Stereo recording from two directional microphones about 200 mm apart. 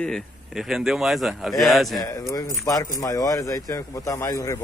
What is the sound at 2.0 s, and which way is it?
Speech, 15° left (ahead or behind).